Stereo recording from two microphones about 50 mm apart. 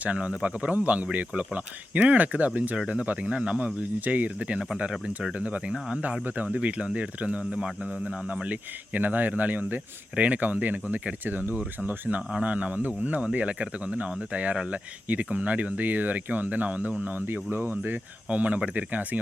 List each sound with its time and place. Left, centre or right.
0.0 s speech: right
2.7 s speech: right
4.8 s speech: centre
8.4 s speech: right
17.2 s speech: right
18.3 s speech: right